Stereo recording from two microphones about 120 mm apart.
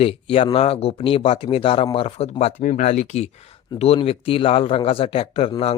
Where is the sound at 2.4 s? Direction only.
75° left (ahead or behind).